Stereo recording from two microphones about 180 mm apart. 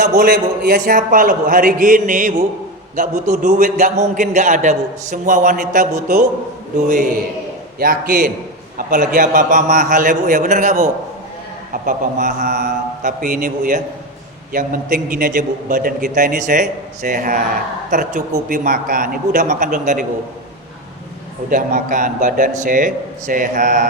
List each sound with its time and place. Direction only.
0.0 s a man's voice: 45° right (ahead or behind)
21.5 s a man's voice: 45° right (ahead or behind)